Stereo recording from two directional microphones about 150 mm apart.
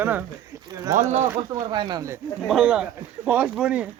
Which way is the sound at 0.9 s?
55° right (ahead or behind).